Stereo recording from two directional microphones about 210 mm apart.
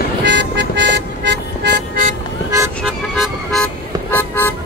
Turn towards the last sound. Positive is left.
turn(degrees=10)  # may be behind; listen again after turning